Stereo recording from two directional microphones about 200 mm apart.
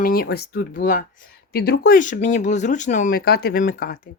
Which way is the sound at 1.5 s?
50° left (ahead or behind).